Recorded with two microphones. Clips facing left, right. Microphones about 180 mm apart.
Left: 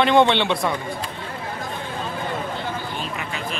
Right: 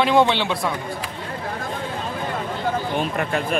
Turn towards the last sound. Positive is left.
turn(degrees=-50)  # may be behind; listen again after turning